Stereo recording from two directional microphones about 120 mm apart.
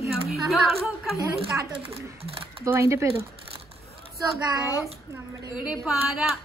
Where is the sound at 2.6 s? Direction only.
25° right (ahead or behind).